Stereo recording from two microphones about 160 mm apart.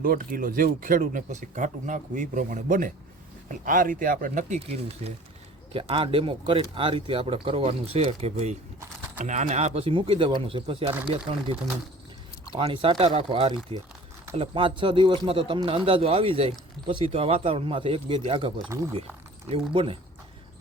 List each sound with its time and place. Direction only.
0.0 s speech: 65° right (ahead or behind); by 10.9 s 35° right (ahead or behind)
12.5 s speech: 35° right (ahead or behind)
18.7 s speech: 15° right (ahead or behind)
19.5 s speech: 35° right (ahead or behind)